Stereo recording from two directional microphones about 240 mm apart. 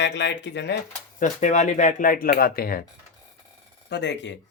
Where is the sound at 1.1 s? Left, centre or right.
Left.